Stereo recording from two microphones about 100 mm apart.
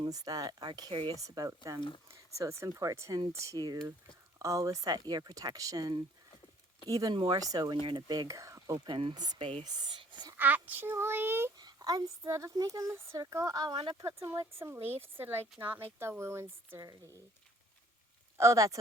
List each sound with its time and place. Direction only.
0.0 s speech: 40° right (ahead or behind)
1.1 s speech: 35° right (ahead or behind)
7.1 s speech: 50° right (ahead or behind)
7.8 s speech: 50° right (ahead or behind); by 8.8 s 35° right (ahead or behind)
8.9 s speech: 55° right (ahead or behind)
9.1 s speech: 40° right (ahead or behind)
9.4 s speech: 60° right (ahead or behind)
9.6 s speech: 45° right (ahead or behind)
10.3 s speech: 15° right (ahead or behind)
11.5 s speech: 40° right (ahead or behind)
13.7 s speech: 70° right (ahead or behind)
14.2 s speech: 30° right (ahead or behind)
18.3 s speech: 30° right (ahead or behind)